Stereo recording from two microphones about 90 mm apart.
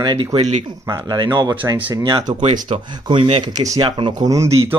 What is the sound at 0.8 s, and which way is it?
Speech, 45° right (ahead or behind).